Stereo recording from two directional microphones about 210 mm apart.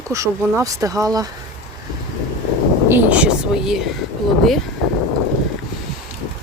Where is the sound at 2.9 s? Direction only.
5° right (ahead or behind).